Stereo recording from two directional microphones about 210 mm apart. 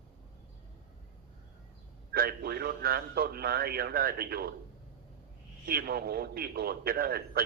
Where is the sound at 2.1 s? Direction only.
45° right (ahead or behind).